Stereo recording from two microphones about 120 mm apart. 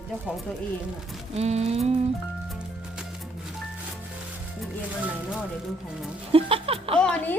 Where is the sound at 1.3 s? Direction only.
65° right (ahead or behind).